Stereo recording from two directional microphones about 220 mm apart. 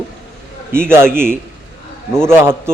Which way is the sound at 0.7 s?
10° right (ahead or behind).